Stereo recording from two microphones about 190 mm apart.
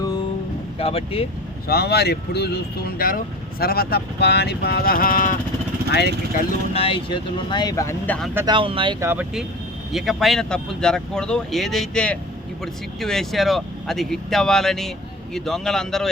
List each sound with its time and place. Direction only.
0.8 s speech: 30° left (ahead or behind)
1.6 s speech: 55° left (ahead or behind)
5.9 s speech: 60° left (ahead or behind)
6.7 s speech: 30° left (ahead or behind); by 8.3 s 10° left (ahead or behind)
8.4 s speech: 25° right (ahead or behind)
9.0 s speech: 10° right (ahead or behind)